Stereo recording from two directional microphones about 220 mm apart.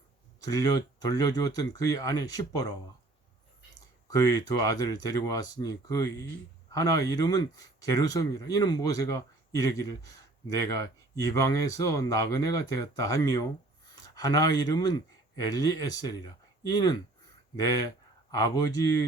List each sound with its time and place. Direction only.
0.4 s speech: 15° left (ahead or behind)
4.1 s a man's voice: 15° left (ahead or behind)